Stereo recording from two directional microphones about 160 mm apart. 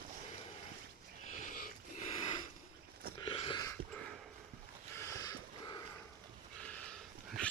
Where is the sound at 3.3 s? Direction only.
30° left (ahead or behind).